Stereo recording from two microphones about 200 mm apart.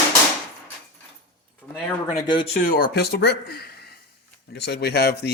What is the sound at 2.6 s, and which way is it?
Speech, 45° left (ahead or behind).